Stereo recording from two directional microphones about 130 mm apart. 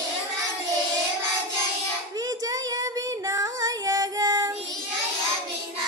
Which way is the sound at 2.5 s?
30° right (ahead or behind).